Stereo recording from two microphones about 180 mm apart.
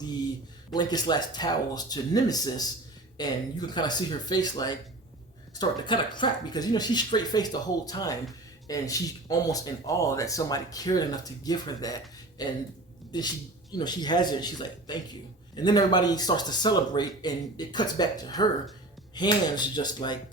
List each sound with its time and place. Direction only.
0.7 s speech: 25° left (ahead or behind)